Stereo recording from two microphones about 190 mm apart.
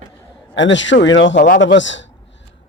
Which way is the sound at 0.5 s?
75° left (ahead or behind).